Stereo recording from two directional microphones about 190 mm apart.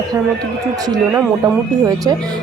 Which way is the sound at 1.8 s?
20° right (ahead or behind).